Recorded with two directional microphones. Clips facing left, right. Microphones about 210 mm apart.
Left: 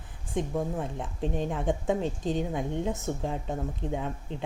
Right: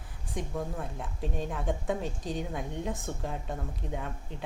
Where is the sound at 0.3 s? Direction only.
25° left (ahead or behind).